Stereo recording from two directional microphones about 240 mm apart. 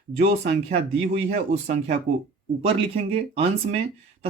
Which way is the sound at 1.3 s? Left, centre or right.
Right.